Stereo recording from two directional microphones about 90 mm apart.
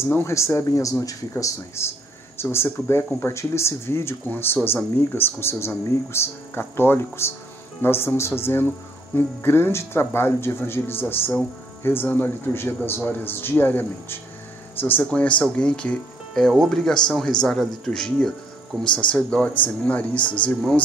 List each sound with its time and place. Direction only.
0.0 s speech: 30° left (ahead or behind); by 20.8 s 15° left (ahead or behind)